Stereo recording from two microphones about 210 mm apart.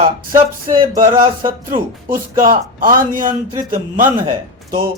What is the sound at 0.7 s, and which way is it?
A man's voice, 40° right (ahead or behind).